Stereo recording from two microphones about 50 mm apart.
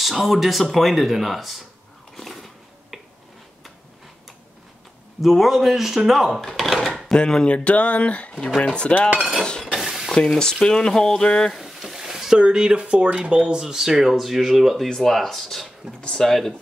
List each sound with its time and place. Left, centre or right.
0.0 s speech: centre
2.1 s a sound: centre
5.2 s speech: centre
6.4 s a sound: centre
7.1 s speech: centre
9.4 s chink: centre
9.8 s stir: centre
10.1 s speech: centre
11.5 s a sound: centre
12.4 s speech: centre
14.9 s speech: centre